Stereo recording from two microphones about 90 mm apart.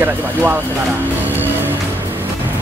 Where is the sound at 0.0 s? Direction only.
25° right (ahead or behind).